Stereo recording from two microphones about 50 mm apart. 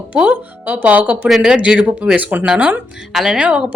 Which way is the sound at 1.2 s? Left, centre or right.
Centre.